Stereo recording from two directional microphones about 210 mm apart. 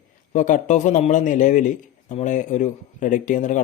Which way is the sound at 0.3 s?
35° left (ahead or behind).